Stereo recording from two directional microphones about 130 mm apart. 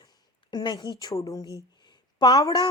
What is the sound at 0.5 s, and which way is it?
A woman's voice, 35° left (ahead or behind).